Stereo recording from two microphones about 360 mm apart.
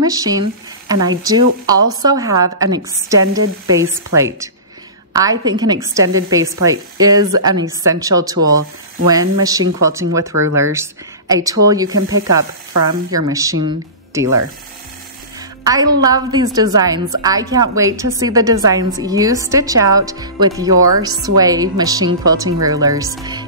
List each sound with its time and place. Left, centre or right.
0.0 s a woman's voice: centre
1.8 s a woman's voice: right
2.0 s a woman's voice: centre
15.6 s a woman's voice: centre